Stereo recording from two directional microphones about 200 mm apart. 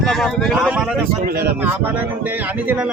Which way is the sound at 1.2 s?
50° right (ahead or behind).